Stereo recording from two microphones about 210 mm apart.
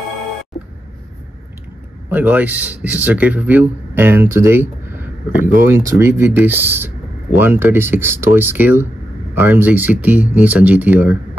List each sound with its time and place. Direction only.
2.0 s speech: 10° right (ahead or behind)